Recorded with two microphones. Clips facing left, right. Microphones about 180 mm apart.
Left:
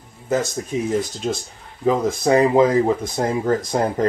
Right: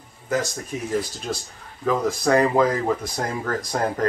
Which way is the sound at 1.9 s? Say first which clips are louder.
Left 3 dB; 20° left (ahead or behind).